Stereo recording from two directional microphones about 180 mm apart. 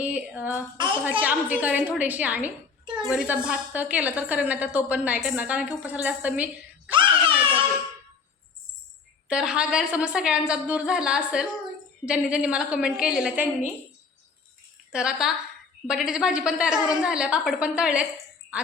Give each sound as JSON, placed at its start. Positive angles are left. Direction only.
{"t": 0.0, "sound": "a woman's voice", "side_deg": -5}
{"t": 6.9, "sound": "music", "side_deg": -30}
{"t": 9.3, "sound": "a woman's voice", "side_deg": -5}
{"t": 14.9, "sound": "a woman's voice", "side_deg": -5}